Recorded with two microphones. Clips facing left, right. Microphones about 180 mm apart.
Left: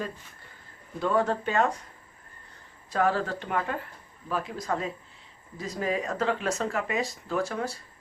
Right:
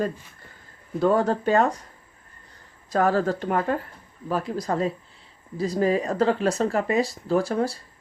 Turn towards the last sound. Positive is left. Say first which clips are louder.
# right 7 dB
turn(degrees=-35)  # may be behind; listen again after turning